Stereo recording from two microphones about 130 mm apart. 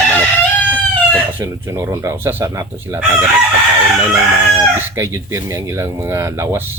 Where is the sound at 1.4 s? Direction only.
20° right (ahead or behind).